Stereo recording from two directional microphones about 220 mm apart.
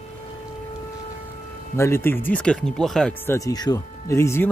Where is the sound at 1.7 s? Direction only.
10° left (ahead or behind).